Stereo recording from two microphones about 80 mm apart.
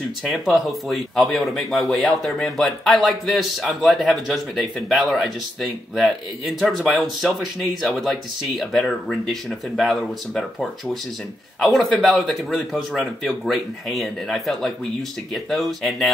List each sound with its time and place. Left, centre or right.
0.3 s speech: centre